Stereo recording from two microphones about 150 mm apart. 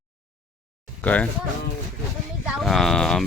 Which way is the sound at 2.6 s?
Centre (ahead or behind).